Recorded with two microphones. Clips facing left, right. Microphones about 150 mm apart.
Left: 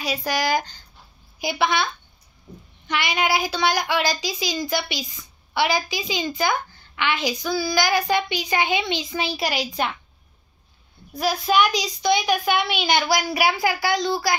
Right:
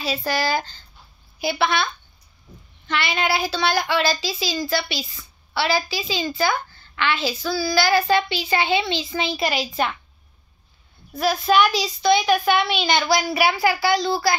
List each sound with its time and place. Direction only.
0.0 s a woman's voice: 15° left (ahead or behind)
2.9 s a woman's voice: 15° left (ahead or behind)
9.7 s a woman's voice: centre (ahead or behind)
11.1 s a woman's voice: 5° left (ahead or behind)